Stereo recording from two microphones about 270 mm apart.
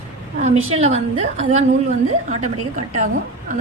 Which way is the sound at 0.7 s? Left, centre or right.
Right.